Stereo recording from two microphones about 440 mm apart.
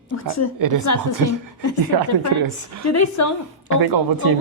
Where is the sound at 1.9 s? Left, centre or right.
Right.